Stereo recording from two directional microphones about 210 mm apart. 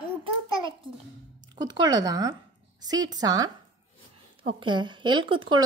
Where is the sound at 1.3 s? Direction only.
20° right (ahead or behind).